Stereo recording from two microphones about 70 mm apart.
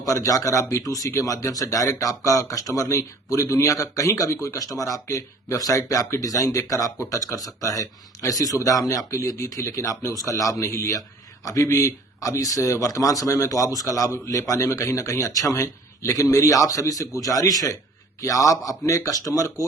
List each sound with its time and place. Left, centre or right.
0.0 s a man's voice: left